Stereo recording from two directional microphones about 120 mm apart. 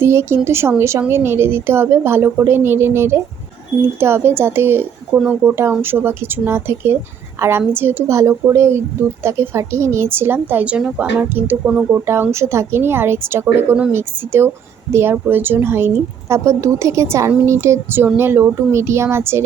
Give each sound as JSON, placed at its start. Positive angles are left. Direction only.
{"t": 0.0, "sound": "a woman's voice", "side_deg": -20}
{"t": 11.9, "sound": "a woman's voice", "side_deg": -20}